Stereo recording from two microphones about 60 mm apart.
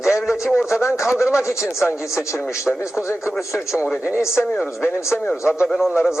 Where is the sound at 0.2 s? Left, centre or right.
Centre.